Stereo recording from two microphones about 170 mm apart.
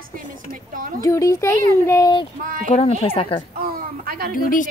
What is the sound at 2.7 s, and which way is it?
Speech, 35° left (ahead or behind).